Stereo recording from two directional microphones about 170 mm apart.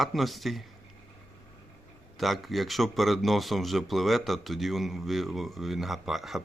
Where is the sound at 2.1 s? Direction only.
Centre (ahead or behind).